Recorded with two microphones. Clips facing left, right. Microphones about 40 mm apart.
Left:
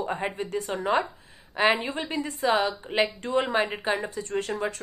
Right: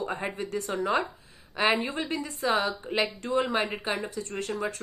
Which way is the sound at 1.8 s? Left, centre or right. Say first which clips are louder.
Left 1 dB; left.